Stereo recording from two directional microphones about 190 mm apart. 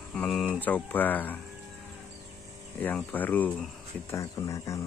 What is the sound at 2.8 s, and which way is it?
Speech, 10° left (ahead or behind).